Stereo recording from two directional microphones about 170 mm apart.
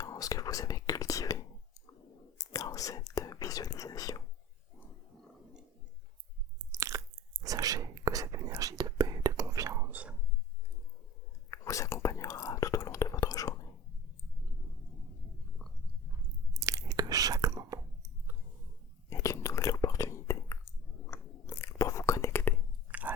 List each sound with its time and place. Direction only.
0.0 s whispering: 20° left (ahead or behind)
6.7 s biting: 20° right (ahead or behind)
7.4 s whispering: 20° right (ahead or behind)
11.5 s whispering: 20° left (ahead or behind)
16.6 s chewing: 20° right (ahead or behind)
19.1 s whispering: 15° left (ahead or behind)
22.9 s chewing: 10° right (ahead or behind)